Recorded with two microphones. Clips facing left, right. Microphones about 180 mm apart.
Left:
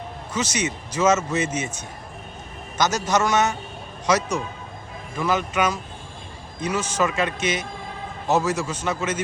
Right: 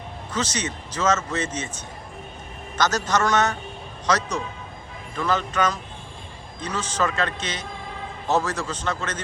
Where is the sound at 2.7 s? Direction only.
10° left (ahead or behind).